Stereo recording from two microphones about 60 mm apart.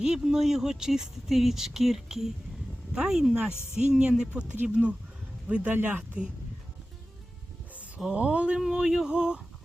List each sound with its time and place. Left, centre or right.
0.0 s speech: centre
5.7 s speech: right
7.9 s speech: centre